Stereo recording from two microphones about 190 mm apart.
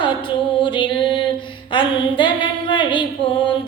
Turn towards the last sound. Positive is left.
turn(degrees=25)  # may be behind; listen again after turning